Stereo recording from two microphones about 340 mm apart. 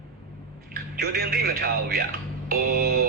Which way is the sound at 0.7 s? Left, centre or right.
Right.